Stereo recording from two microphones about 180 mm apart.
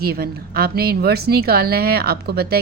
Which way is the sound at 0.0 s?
60° right (ahead or behind).